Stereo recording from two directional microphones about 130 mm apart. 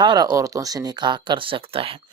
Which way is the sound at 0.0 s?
35° right (ahead or behind).